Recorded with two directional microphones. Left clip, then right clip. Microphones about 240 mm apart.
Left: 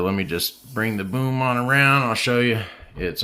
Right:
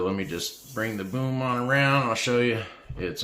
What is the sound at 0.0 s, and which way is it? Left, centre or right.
Speech, left.